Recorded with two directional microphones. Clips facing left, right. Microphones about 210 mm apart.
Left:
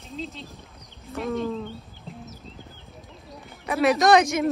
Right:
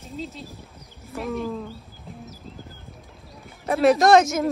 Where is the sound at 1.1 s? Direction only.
Centre (ahead or behind).